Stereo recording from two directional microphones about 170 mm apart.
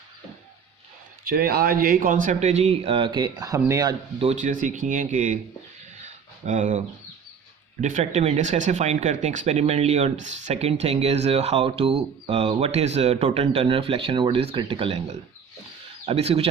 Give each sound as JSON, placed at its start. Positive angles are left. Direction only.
{"t": 1.2, "sound": "speech", "side_deg": -60}
{"t": 4.2, "sound": "speech", "side_deg": -40}
{"t": 6.1, "sound": "a sound", "side_deg": -45}
{"t": 7.8, "sound": "speech", "side_deg": -45}